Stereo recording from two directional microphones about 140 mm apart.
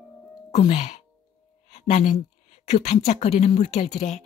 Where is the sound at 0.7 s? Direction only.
50° left (ahead or behind).